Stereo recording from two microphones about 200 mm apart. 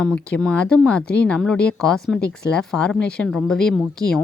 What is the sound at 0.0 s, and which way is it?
A woman's voice, 5° left (ahead or behind).